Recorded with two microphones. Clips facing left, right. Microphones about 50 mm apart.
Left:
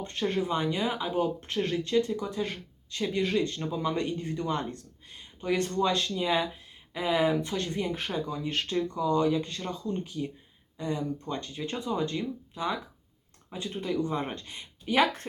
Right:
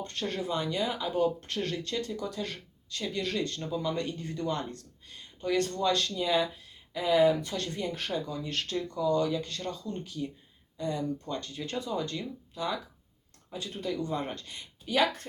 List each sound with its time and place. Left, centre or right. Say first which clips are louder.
0.0 s speech: left 4 dB; centre